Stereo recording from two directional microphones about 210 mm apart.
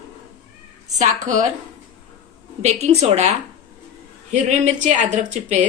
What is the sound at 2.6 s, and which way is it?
Speech, 30° right (ahead or behind).